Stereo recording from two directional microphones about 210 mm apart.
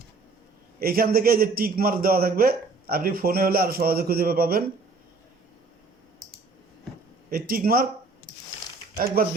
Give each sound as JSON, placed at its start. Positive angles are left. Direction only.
{"t": 0.8, "sound": "a man's voice", "side_deg": -45}
{"t": 7.3, "sound": "a man's voice", "side_deg": -45}
{"t": 9.0, "sound": "a man's voice", "side_deg": -45}